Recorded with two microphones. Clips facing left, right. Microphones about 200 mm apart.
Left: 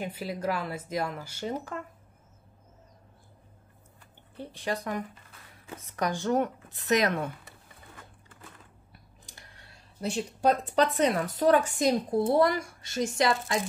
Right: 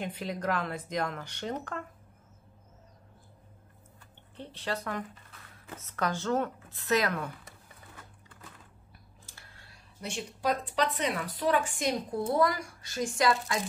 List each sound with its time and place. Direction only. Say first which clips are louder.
0.0 s speech: left 2 dB; 5° left (ahead or behind)
4.4 s speech: left 3 dB; 15° left (ahead or behind)
9.2 s a sound: left 3 dB; 20° left (ahead or behind)
9.9 s speech: left 7 dB; 40° left (ahead or behind)